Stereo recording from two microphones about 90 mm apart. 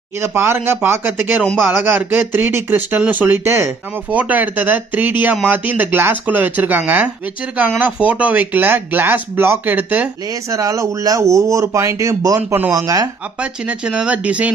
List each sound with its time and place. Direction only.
0.2 s speech: 25° right (ahead or behind)
4.1 s speech: 15° right (ahead or behind)
10.5 s speech: 40° right (ahead or behind)
12.4 s speech: 20° right (ahead or behind)
12.7 s speech: 40° right (ahead or behind)
13.4 s speech: 10° right (ahead or behind)